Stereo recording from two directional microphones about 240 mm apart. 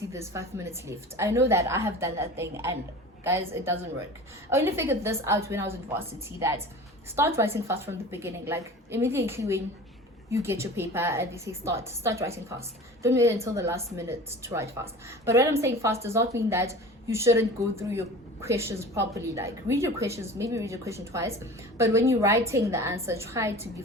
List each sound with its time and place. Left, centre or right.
0.1 s a woman's voice: centre
7.2 s a woman's voice: centre